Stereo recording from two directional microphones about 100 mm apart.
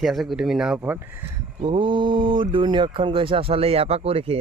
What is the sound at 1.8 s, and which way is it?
Speech, 55° right (ahead or behind).